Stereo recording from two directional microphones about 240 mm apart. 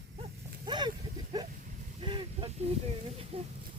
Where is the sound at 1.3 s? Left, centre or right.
Centre.